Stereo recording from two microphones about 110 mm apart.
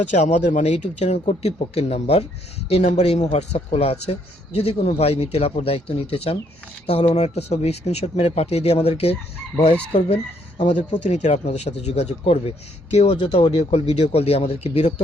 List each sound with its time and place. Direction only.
0.2 s a man's voice: 90° left; by 9.1 s 65° left (ahead or behind)
10.6 s a man's voice: 90° left
12.2 s speech: 65° left (ahead or behind)